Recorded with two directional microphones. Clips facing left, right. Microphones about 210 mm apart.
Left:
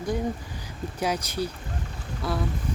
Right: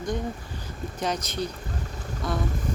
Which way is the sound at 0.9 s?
10° left (ahead or behind).